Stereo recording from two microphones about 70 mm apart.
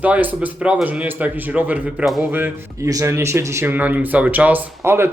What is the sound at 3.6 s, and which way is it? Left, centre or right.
A man's voice, right.